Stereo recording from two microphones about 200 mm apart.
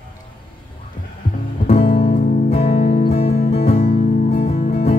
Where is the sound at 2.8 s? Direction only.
45° left (ahead or behind).